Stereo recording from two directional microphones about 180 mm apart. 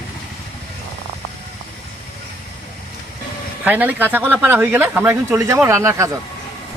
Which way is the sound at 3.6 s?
10° right (ahead or behind).